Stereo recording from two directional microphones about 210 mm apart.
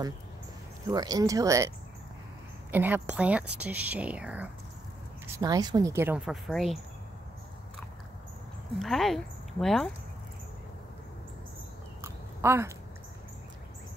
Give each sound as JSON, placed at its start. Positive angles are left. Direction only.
{"t": 0.8, "sound": "speech", "side_deg": -20}
{"t": 2.7, "sound": "speech", "side_deg": -10}
{"t": 5.2, "sound": "speech", "side_deg": -20}
{"t": 8.7, "sound": "speech", "side_deg": 0}
{"t": 12.0, "sound": "a sound", "side_deg": -10}